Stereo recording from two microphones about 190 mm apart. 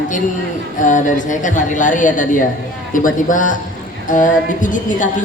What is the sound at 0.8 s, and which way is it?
A woman's voice, 40° left (ahead or behind).